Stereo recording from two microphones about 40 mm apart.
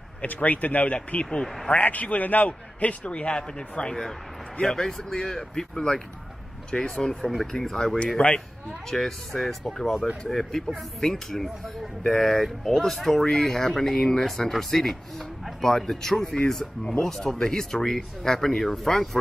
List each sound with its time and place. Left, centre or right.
0.2 s speech: left
1.2 s speech: centre
1.8 s a man's voice: left; by 7.2 s centre
7.2 s speech: centre
8.2 s a man's voice: left
8.9 s speech: centre